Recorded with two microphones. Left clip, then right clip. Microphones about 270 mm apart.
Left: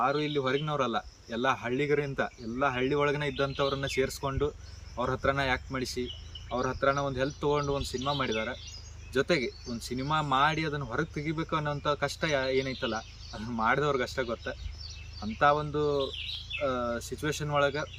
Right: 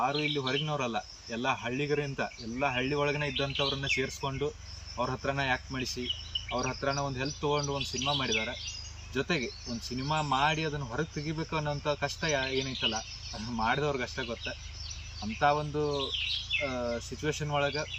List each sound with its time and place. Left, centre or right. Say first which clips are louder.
0.0 s speech: left 2 dB; centre